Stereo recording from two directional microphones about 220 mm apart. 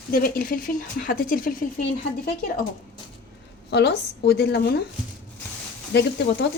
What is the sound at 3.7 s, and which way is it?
Speech, 50° left (ahead or behind).